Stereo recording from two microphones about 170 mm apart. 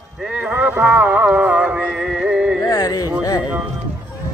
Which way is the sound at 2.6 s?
25° left (ahead or behind).